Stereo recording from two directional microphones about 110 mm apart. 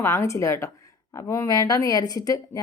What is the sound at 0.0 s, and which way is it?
Speech, 25° left (ahead or behind).